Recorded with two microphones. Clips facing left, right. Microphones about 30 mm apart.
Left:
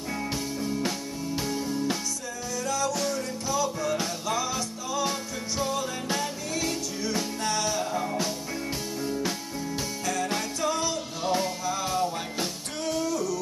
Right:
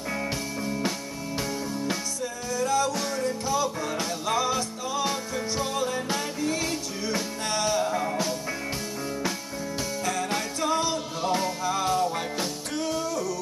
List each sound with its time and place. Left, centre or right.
2.5 s music: centre
10.0 s music: centre
13.0 s music: centre